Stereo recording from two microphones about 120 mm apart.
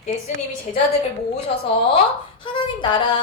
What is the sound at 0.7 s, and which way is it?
Speech, 90° left.